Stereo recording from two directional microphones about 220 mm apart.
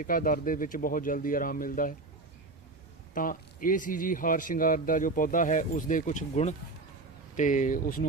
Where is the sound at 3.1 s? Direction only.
40° left (ahead or behind).